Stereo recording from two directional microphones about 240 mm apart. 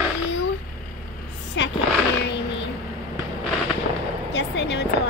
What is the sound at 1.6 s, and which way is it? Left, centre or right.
Speech, left.